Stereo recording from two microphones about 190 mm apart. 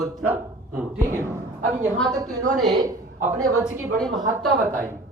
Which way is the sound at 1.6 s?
40° right (ahead or behind).